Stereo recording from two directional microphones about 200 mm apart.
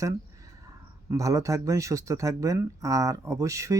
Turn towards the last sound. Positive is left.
turn(degrees=-15)  # may be behind; listen again after turning